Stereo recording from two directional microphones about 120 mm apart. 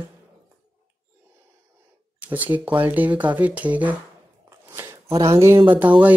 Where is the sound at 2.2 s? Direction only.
15° right (ahead or behind).